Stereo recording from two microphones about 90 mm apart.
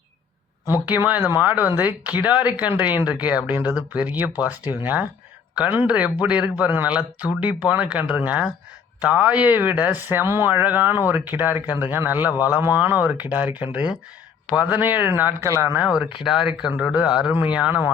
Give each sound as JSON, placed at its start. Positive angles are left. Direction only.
{"t": 0.6, "sound": "speech", "side_deg": -20}
{"t": 15.4, "sound": "speech", "side_deg": -30}
{"t": 16.0, "sound": "speech", "side_deg": -5}